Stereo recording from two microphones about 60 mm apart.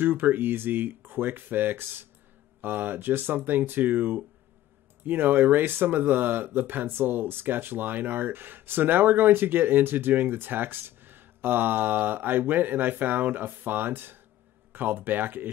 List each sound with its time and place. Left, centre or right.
0.0 s speech: right